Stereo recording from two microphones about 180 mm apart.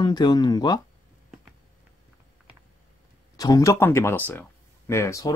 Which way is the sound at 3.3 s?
20° left (ahead or behind).